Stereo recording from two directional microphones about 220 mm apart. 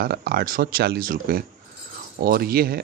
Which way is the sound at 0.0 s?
45° right (ahead or behind).